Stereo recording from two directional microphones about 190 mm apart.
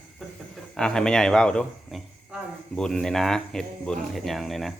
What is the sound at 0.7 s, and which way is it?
A man's voice, 5° left (ahead or behind).